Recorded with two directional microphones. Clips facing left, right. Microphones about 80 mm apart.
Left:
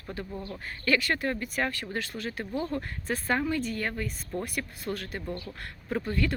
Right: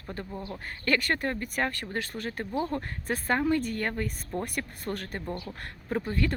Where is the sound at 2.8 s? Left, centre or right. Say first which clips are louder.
Even; right.